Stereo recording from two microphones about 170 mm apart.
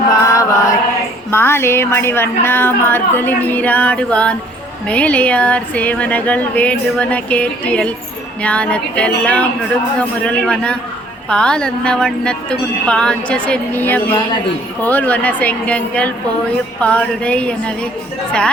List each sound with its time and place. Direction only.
0.1 s chant: 20° left (ahead or behind)
1.3 s speech: 15° left (ahead or behind)